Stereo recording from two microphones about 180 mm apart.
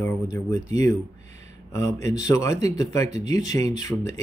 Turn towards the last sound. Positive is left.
turn(degrees=20)  # may be behind; listen again after turning